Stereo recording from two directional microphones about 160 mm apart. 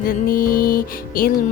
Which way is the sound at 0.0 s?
60° left (ahead or behind).